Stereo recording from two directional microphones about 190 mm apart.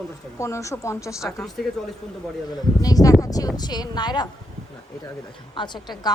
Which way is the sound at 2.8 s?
20° left (ahead or behind).